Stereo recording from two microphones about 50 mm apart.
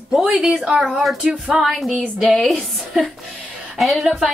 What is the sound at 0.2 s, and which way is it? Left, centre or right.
A woman's voice, centre.